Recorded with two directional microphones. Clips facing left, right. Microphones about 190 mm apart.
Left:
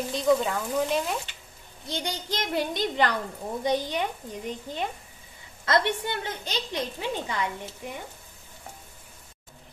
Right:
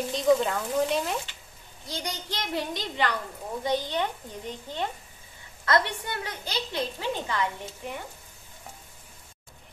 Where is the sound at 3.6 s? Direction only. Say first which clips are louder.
Left 1 dB; 15° left (ahead or behind).